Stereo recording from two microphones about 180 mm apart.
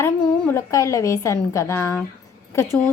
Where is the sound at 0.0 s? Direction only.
15° left (ahead or behind).